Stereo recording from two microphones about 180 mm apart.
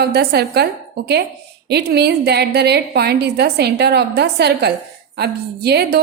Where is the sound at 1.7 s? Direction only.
65° right (ahead or behind).